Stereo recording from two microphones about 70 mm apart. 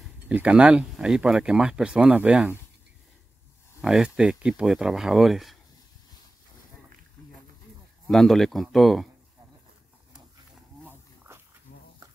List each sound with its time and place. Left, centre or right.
0.3 s speech: centre
3.8 s speech: centre
8.1 s speech: centre
11.3 s dog: right